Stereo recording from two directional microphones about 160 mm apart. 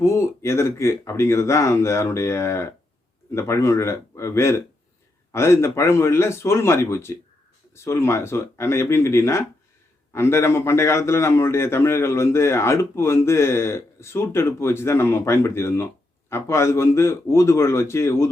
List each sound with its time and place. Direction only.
0.0 s a man's voice: 15° left (ahead or behind)